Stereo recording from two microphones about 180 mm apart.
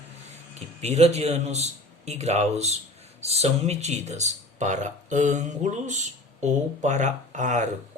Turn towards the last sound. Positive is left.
turn(degrees=-45)  # may be behind; listen again after turning